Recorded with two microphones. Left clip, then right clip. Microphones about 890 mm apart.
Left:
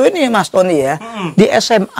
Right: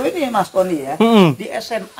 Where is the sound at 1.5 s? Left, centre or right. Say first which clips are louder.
Left 12 dB; left.